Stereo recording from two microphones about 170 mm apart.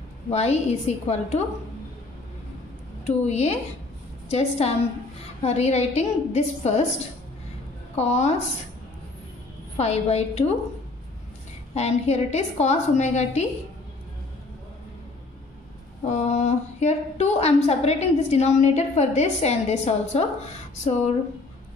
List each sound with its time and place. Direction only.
0.3 s a woman's voice: 40° left (ahead or behind)
3.1 s a woman's voice: 40° left (ahead or behind)
7.9 s a woman's voice: 40° left (ahead or behind)
9.8 s a woman's voice: 40° left (ahead or behind)
11.7 s a woman's voice: 40° left (ahead or behind)
16.1 s a woman's voice: 45° left (ahead or behind)